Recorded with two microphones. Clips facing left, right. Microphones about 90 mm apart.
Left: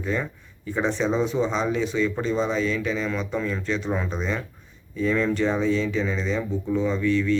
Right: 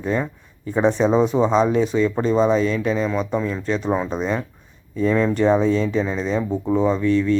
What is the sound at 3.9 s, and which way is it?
Speech, 25° right (ahead or behind).